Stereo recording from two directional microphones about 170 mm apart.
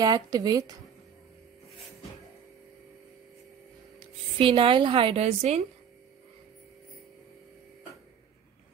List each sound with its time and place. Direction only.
0.0 s speech: 25° right (ahead or behind)
4.4 s a woman's voice: 30° right (ahead or behind)